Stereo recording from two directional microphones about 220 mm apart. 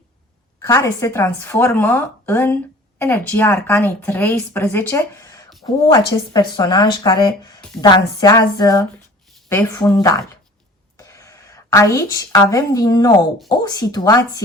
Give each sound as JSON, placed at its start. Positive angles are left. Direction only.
{"t": 0.6, "sound": "a woman's voice", "side_deg": 15}